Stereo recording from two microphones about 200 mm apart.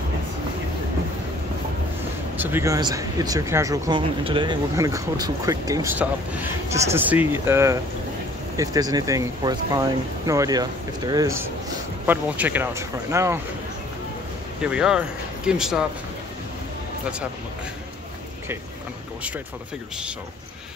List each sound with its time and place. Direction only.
2.3 s speech: 10° right (ahead or behind)
12.1 s speech: 10° right (ahead or behind)
14.6 s speech: 5° right (ahead or behind)